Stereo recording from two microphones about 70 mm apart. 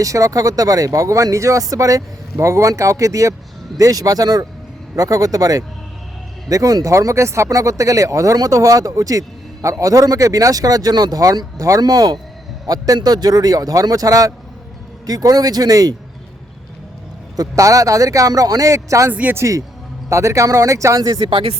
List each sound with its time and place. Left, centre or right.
0.0 s a man's voice: right
11.8 s speech: right
12.6 s a man's voice: right
17.3 s a man's voice: right
21.0 s speech: right